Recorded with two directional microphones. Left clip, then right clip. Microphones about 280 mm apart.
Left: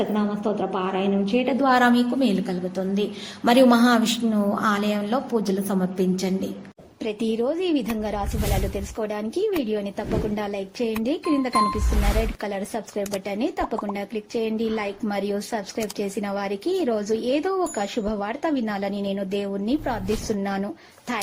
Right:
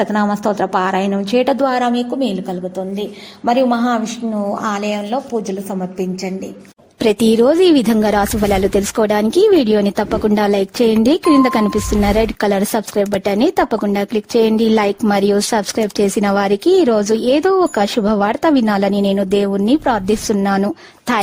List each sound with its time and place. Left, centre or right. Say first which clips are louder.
0.1 s speech: right 9 dB; right
1.6 s a woman's voice: right 3 dB; centre
3.4 s a woman's voice: right 2 dB; centre
7.0 s speech: right 13 dB; right